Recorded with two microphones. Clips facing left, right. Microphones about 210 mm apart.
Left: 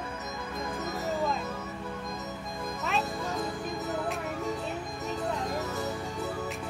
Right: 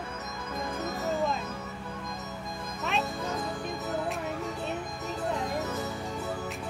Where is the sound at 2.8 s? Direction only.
Centre (ahead or behind).